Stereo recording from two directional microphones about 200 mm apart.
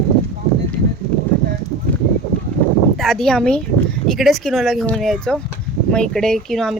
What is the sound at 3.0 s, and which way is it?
Speech, centre (ahead or behind).